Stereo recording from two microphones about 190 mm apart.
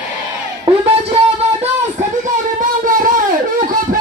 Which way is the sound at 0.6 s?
30° right (ahead or behind).